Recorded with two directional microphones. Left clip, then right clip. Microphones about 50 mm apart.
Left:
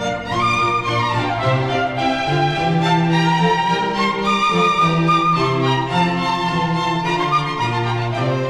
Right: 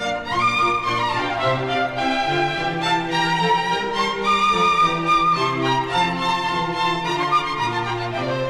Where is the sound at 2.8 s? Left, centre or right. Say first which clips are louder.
Left 1 dB; centre.